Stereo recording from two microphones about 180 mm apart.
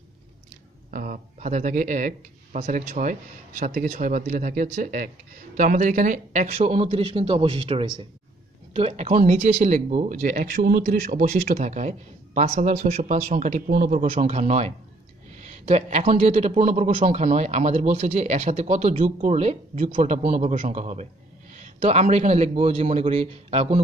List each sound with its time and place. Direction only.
0.9 s speech: 45° right (ahead or behind); by 8.1 s 25° right (ahead or behind)
8.7 s a man's voice: 35° right (ahead or behind)